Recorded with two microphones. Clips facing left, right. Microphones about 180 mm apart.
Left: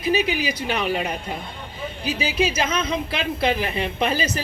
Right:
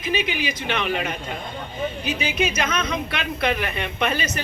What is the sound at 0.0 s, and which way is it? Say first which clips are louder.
A woman's voice: left 3 dB; 40° left (ahead or behind).